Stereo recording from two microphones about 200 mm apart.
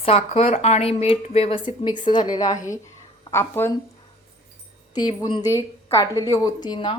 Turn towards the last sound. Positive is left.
turn(degrees=25)  # may be behind; listen again after turning